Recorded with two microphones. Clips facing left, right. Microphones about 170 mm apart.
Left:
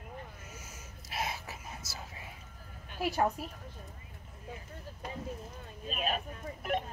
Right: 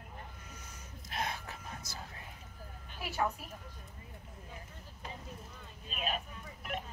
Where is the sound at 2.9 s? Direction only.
40° left (ahead or behind).